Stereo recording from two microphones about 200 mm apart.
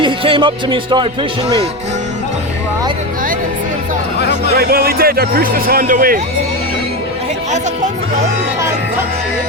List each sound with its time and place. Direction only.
0.0 s speech: 25° right (ahead or behind)
4.5 s a man's voice: 50° right (ahead or behind)